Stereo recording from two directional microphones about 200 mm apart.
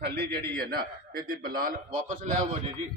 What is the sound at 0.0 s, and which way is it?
A man's voice, 55° right (ahead or behind).